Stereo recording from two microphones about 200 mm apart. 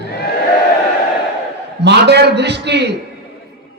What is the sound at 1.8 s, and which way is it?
A man's voice, 55° right (ahead or behind).